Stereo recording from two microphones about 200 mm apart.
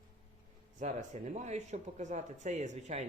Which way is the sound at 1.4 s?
35° right (ahead or behind).